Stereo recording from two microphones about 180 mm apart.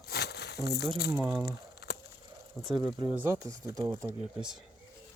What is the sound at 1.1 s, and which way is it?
Speech, 15° right (ahead or behind).